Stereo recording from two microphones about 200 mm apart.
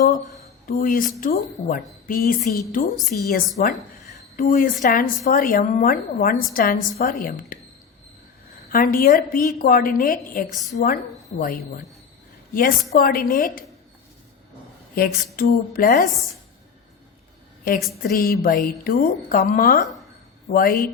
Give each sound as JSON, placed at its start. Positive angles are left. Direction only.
{"t": 0.7, "sound": "a woman's voice", "side_deg": 45}
{"t": 8.7, "sound": "a woman's voice", "side_deg": 45}
{"t": 14.9, "sound": "a woman's voice", "side_deg": 45}
{"t": 18.1, "sound": "a woman's voice", "side_deg": 45}